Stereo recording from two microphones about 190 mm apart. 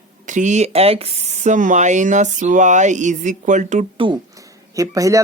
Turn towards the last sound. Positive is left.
turn(degrees=-15)  # may be behind; listen again after turning